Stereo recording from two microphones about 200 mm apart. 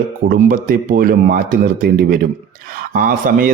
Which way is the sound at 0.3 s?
45° right (ahead or behind).